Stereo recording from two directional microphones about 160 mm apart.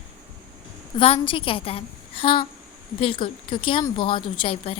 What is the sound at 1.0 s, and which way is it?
Speech, 35° left (ahead or behind).